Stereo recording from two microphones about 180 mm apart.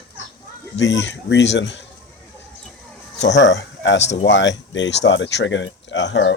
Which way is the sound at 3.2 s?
80° left.